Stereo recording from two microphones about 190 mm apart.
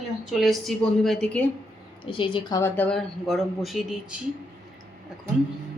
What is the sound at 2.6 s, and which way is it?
Speech, 5° left (ahead or behind).